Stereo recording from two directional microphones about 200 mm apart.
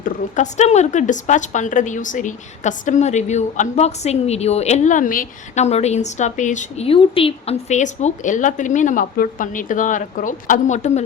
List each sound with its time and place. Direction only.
0.0 s a woman's voice: 35° left (ahead or behind)